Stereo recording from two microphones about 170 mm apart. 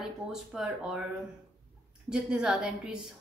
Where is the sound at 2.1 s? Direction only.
5° right (ahead or behind).